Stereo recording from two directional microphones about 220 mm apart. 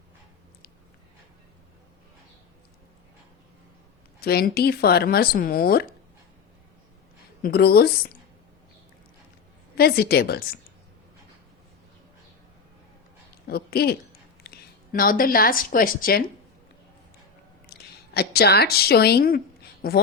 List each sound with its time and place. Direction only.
4.2 s speech: 45° left (ahead or behind)
7.4 s speech: 45° left (ahead or behind)
9.7 s speech: 45° left (ahead or behind)
13.5 s speech: 45° left (ahead or behind)
14.5 s a sound: 45° left (ahead or behind)
14.9 s a woman's voice: 40° left (ahead or behind)
17.7 s a woman's voice: 45° left (ahead or behind)